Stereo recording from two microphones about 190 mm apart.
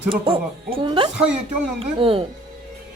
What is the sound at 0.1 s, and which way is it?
Speech, 30° right (ahead or behind).